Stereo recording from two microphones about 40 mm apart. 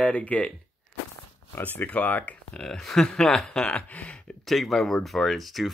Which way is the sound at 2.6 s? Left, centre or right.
Centre.